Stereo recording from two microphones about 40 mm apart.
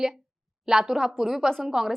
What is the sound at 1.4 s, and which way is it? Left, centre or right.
Speech, centre.